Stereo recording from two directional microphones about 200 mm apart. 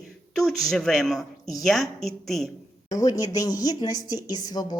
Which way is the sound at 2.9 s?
15° left (ahead or behind).